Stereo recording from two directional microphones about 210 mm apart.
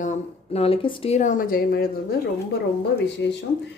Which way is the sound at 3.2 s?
55° left (ahead or behind).